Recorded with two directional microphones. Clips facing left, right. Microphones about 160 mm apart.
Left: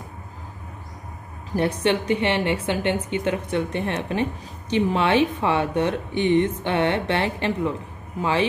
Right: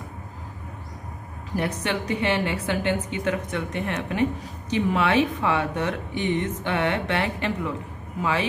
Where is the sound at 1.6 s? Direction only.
25° left (ahead or behind).